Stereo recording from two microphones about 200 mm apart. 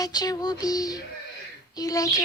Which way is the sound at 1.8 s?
15° left (ahead or behind).